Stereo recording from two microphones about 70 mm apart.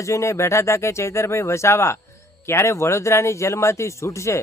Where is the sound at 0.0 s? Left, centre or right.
Left.